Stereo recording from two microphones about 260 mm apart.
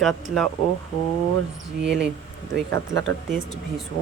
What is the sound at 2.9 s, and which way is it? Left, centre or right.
Speech, right.